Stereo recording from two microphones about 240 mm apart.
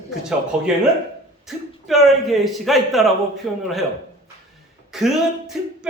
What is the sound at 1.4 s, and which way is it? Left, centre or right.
Speech, centre.